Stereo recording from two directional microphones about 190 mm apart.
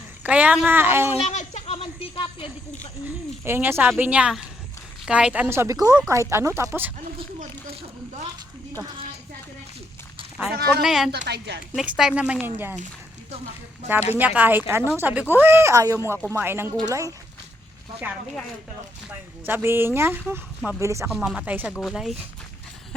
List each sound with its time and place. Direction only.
0.2 s speech: 5° right (ahead or behind)
1.1 s a sound: 40° left (ahead or behind)
3.4 s speech: 10° right (ahead or behind)
7.3 s speech: 35° right (ahead or behind)
10.7 s speech: centre (ahead or behind)
11.3 s a woman's voice: 60° right (ahead or behind)
11.8 s speech: centre (ahead or behind)
14.2 s speech: 10° right (ahead or behind)
19.5 s speech: 10° right (ahead or behind)